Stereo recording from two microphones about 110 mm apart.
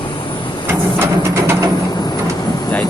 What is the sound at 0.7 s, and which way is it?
Train, 20° right (ahead or behind).